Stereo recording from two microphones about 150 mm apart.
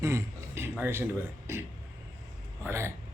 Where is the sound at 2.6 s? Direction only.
15° right (ahead or behind).